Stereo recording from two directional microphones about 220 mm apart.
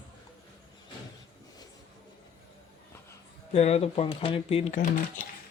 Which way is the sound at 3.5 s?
30° left (ahead or behind).